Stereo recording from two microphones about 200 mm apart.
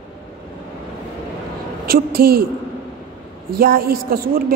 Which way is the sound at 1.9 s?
50° right (ahead or behind).